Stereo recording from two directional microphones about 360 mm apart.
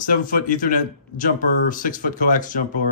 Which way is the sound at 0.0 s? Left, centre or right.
Left.